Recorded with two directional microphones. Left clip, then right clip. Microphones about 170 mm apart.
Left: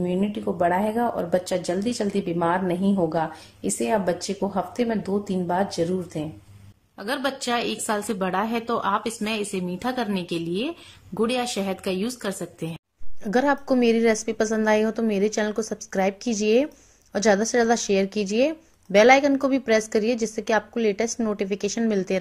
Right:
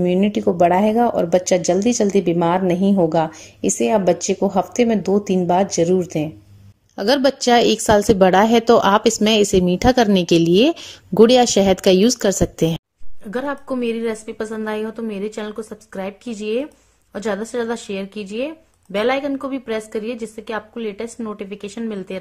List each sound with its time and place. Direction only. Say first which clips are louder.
0.0 s speech: right 9 dB; 20° right (ahead or behind)
7.0 s a woman's voice: right 11 dB; 35° right (ahead or behind)
13.3 s speech: left 3 dB; 10° left (ahead or behind)